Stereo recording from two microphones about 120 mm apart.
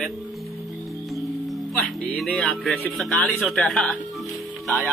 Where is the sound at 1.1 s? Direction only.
Centre (ahead or behind).